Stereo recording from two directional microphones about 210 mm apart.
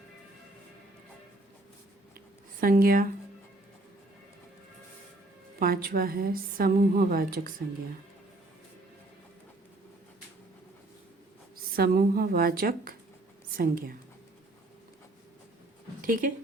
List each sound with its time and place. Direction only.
2.1 s a sound: 45° right (ahead or behind)
5.5 s a woman's voice: 45° right (ahead or behind)
11.7 s a woman's voice: 45° right (ahead or behind)
16.0 s speech: 40° right (ahead or behind)